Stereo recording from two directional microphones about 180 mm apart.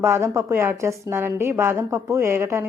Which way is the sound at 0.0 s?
15° right (ahead or behind).